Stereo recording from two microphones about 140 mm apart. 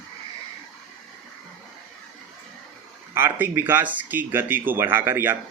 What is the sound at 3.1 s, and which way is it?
Speech, 15° right (ahead or behind).